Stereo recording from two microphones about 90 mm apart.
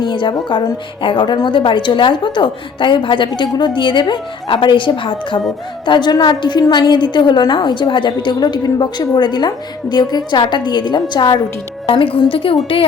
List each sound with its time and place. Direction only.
0.0 s a woman's voice: 60° left (ahead or behind)
11.9 s a woman's voice: 75° left (ahead or behind)
12.3 s a woman's voice: 90° left